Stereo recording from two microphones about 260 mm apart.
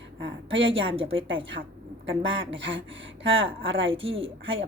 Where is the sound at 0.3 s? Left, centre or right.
Right.